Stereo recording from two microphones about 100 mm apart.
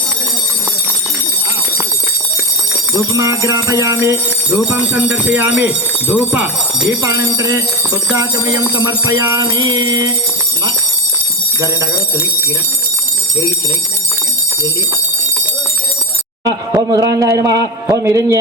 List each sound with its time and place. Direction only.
2.9 s a man's voice: 35° right (ahead or behind)
4.5 s speech: 15° right (ahead or behind)
6.8 s a man's voice: 30° right (ahead or behind)
16.9 s a man's voice: 35° right (ahead or behind)